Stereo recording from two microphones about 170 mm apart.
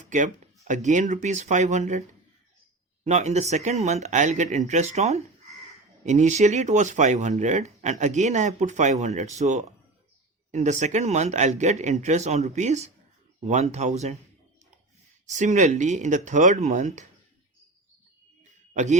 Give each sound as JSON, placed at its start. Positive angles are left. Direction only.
{"t": 0.0, "sound": "a sound", "side_deg": -45}
{"t": 0.7, "sound": "speech", "side_deg": -45}
{"t": 15.3, "sound": "speech", "side_deg": -45}
{"t": 18.7, "sound": "speech", "side_deg": -40}